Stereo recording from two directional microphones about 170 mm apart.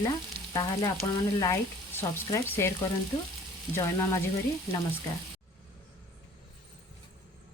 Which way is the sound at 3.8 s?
15° left (ahead or behind).